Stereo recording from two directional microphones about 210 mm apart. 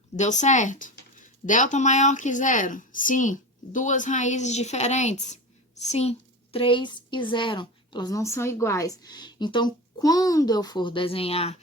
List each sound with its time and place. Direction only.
0.2 s a woman's voice: 35° left (ahead or behind)